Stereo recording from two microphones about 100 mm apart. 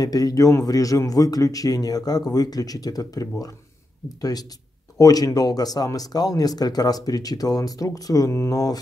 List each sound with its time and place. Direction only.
0.0 s speech: 35° left (ahead or behind)